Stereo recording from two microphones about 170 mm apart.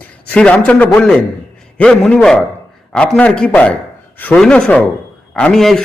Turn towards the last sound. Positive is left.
turn(degrees=0)  # may be behind; listen again after turning